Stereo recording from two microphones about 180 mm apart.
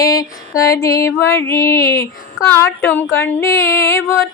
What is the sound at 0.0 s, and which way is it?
Female singing, 20° left (ahead or behind).